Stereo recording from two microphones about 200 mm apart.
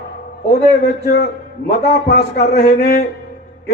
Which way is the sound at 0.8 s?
55° left (ahead or behind).